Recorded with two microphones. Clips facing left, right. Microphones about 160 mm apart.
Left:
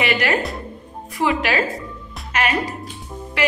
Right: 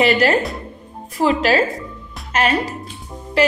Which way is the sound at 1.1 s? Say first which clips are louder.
Right 4 dB; 35° right (ahead or behind).